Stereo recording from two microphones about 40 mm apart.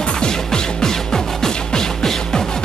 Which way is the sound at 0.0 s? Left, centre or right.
Left.